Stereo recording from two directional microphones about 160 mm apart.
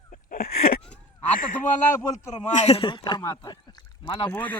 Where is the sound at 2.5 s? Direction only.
45° left (ahead or behind).